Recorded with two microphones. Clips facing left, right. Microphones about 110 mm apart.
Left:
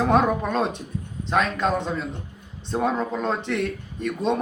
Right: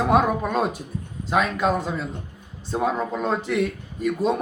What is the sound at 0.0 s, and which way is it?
A man's voice, 5° right (ahead or behind).